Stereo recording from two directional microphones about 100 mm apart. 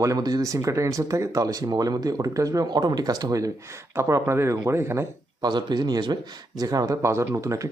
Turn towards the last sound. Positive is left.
turn(degrees=-30)  # may be behind; listen again after turning